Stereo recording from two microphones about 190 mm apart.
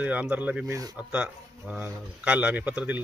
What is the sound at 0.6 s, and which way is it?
Speech, 20° right (ahead or behind).